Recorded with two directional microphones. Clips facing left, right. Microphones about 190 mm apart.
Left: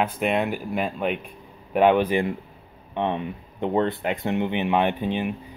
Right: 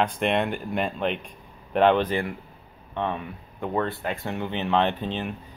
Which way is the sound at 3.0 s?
20° left (ahead or behind).